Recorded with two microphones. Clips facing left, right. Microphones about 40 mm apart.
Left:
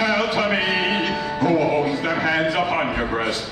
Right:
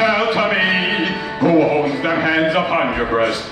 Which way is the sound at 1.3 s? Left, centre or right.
Centre.